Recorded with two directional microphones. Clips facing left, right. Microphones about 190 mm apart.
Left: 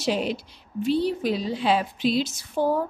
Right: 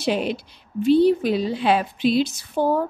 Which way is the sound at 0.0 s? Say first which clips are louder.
Right 2 dB; 60° right (ahead or behind).